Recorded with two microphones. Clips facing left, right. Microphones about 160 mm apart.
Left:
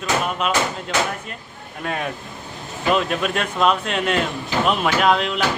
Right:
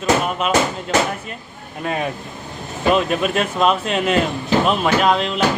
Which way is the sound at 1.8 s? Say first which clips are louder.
Right 3 dB; 5° right (ahead or behind).